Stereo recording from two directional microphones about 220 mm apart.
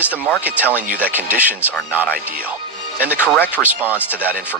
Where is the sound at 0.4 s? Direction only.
5° right (ahead or behind).